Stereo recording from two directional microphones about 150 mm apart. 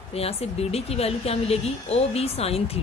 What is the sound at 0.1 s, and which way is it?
Speech, 40° left (ahead or behind).